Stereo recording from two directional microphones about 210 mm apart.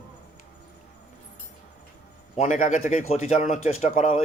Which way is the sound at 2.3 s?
35° left (ahead or behind).